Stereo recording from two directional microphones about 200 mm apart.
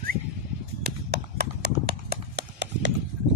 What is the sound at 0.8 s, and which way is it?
Clip-clop, 55° right (ahead or behind).